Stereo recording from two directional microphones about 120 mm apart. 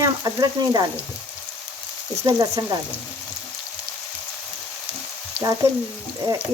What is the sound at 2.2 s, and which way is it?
Speech, 25° right (ahead or behind).